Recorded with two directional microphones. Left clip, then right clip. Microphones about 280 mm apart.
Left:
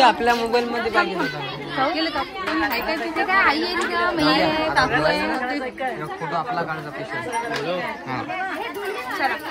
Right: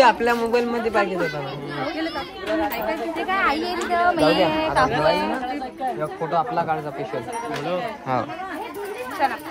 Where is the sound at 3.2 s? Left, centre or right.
Right.